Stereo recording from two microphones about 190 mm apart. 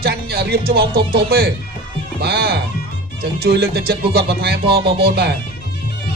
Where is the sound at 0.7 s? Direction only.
55° right (ahead or behind).